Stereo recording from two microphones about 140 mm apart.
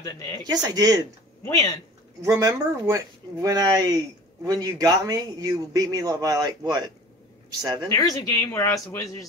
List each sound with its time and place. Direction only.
0.4 s a man's voice: 30° right (ahead or behind)
2.2 s a man's voice: 25° right (ahead or behind)
7.9 s speech: 25° left (ahead or behind)